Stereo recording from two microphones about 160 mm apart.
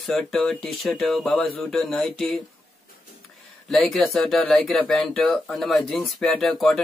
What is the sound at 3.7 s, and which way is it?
Speech, centre (ahead or behind).